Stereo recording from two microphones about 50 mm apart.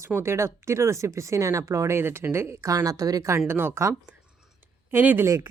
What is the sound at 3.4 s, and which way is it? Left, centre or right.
Speech, right.